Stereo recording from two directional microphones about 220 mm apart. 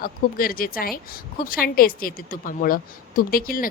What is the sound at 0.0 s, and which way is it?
Speech, 40° left (ahead or behind).